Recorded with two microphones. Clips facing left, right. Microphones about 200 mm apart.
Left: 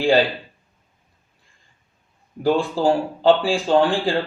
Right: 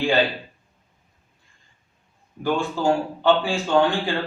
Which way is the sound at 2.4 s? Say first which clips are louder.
Left 4 dB; 30° left (ahead or behind).